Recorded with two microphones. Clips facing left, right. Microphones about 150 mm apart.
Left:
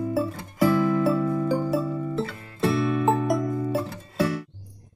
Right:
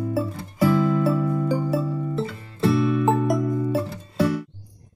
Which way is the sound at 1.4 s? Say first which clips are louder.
Right 1 dB; centre (ahead or behind).